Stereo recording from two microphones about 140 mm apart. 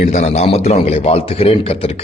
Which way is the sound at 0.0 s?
55° left (ahead or behind).